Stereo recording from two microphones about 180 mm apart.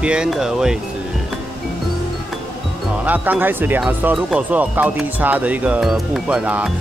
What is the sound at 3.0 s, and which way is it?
Speech, 10° right (ahead or behind).